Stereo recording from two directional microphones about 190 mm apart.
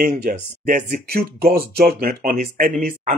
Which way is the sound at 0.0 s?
50° right (ahead or behind).